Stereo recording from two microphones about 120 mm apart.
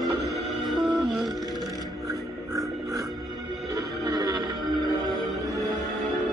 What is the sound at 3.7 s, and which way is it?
Music, 35° right (ahead or behind).